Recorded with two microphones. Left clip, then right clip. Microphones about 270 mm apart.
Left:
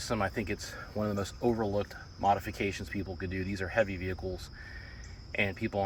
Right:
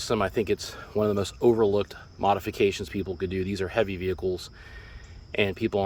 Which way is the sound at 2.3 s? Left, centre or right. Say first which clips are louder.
Right 6 dB; right.